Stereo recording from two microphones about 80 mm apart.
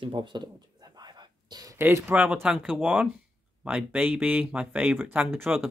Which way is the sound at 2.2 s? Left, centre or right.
Centre.